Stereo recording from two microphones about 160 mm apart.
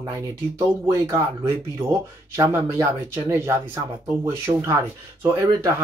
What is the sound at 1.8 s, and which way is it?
Speech, 15° right (ahead or behind).